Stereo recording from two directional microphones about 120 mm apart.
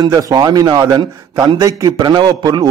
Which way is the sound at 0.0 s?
30° right (ahead or behind).